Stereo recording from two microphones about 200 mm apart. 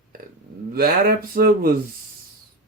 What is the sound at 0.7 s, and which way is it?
Speech, 50° right (ahead or behind).